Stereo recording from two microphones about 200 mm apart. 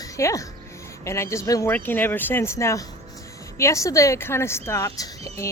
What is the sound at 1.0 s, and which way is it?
A man's voice, 15° left (ahead or behind).